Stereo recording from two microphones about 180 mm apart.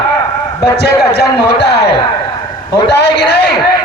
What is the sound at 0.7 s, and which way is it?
A man's voice, 65° left (ahead or behind).